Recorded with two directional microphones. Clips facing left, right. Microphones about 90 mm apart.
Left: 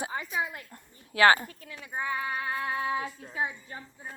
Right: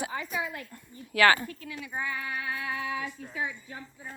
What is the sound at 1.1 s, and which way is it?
Speech, 25° left (ahead or behind).